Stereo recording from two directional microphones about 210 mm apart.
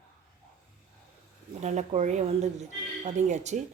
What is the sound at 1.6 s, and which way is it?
Speech, 35° right (ahead or behind).